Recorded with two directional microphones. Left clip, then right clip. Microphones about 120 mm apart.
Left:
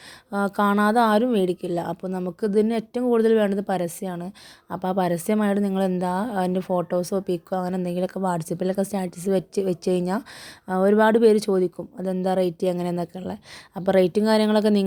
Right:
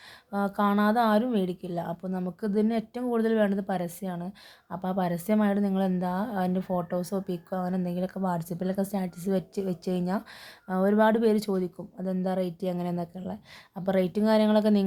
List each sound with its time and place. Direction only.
0.3 s speech: 50° left (ahead or behind)